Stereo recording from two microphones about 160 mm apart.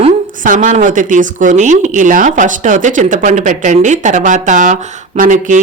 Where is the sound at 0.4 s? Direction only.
55° right (ahead or behind).